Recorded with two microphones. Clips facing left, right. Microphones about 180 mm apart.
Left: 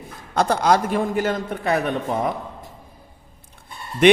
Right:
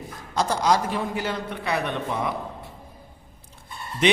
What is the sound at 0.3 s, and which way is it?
A man's voice, 55° left (ahead or behind).